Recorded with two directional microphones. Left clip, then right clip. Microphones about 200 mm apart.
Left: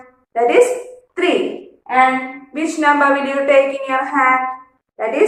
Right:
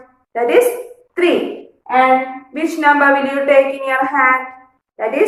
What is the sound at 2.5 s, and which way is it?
A woman's voice, 15° right (ahead or behind).